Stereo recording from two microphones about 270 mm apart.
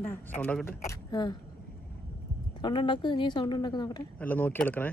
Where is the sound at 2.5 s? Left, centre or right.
Centre.